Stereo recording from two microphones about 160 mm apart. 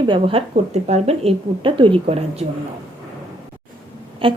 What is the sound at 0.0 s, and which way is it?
A woman's voice, 35° right (ahead or behind).